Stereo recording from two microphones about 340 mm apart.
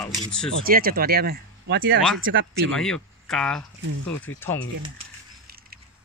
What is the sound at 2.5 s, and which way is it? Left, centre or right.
Speech, centre.